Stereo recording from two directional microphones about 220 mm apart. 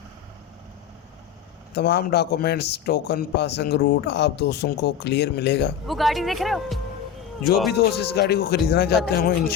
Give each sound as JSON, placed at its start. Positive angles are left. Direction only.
{"t": 1.7, "sound": "a man's voice", "side_deg": 50}
{"t": 5.9, "sound": "speech", "side_deg": 0}
{"t": 7.7, "sound": "a man's voice", "side_deg": 45}